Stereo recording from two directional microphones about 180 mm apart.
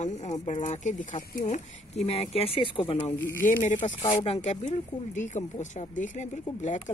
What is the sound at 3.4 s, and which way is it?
Speech, 45° left (ahead or behind).